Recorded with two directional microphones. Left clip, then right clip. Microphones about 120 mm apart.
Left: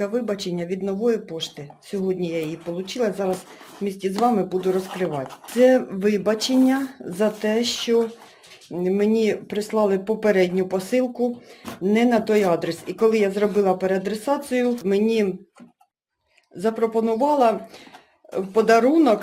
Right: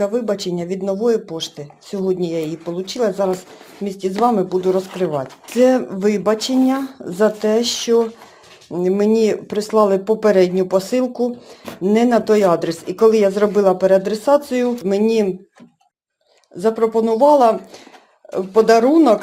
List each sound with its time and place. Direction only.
0.3 s speech: 30° right (ahead or behind)
4.1 s speech: 5° right (ahead or behind)
4.4 s speech: 30° right (ahead or behind)
16.6 s speech: 35° right (ahead or behind)